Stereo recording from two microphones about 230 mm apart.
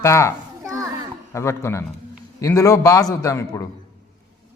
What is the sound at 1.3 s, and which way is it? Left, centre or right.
A man's voice, centre.